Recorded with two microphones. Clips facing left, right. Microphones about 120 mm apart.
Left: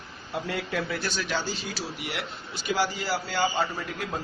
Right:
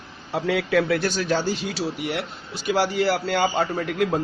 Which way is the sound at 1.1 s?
40° right (ahead or behind).